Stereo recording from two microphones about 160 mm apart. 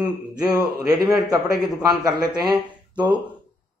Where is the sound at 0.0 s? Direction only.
25° right (ahead or behind).